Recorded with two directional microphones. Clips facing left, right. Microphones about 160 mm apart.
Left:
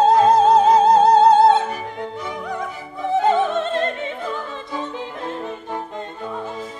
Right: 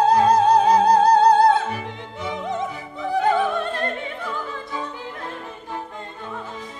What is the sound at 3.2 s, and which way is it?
Opera, 20° left (ahead or behind).